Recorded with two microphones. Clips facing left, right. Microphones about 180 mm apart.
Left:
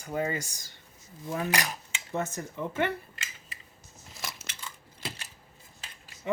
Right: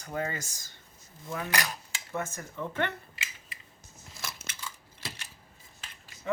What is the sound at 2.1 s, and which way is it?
Speech, 20° left (ahead or behind).